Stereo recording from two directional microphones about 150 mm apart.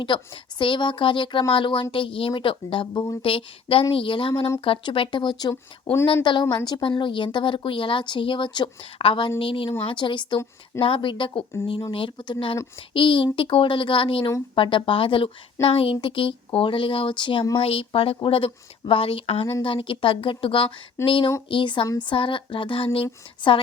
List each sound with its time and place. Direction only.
0.1 s speech: 35° left (ahead or behind)